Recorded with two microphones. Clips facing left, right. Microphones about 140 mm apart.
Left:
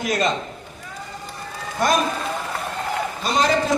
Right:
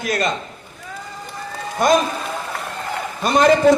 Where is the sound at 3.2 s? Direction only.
55° right (ahead or behind).